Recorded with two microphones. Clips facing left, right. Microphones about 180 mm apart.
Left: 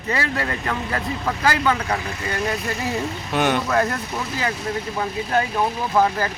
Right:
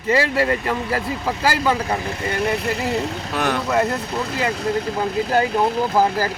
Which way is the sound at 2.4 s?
65° right (ahead or behind).